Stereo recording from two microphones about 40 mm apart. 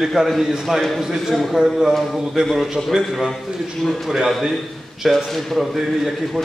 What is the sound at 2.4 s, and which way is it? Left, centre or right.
Speech, centre.